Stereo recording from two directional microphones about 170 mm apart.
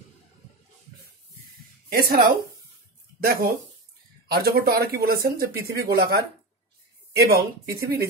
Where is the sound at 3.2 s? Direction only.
60° right (ahead or behind).